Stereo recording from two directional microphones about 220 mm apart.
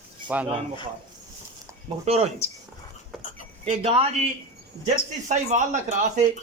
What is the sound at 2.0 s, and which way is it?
Speech, 30° right (ahead or behind).